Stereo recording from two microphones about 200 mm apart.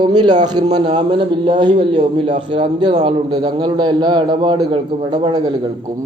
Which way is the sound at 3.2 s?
20° right (ahead or behind).